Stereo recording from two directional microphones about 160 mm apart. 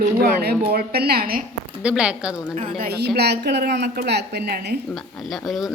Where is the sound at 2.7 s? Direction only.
75° right (ahead or behind).